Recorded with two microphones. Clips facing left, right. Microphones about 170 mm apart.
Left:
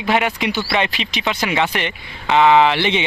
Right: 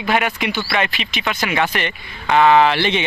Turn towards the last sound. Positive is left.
turn(degrees=20)  # may be behind; listen again after turning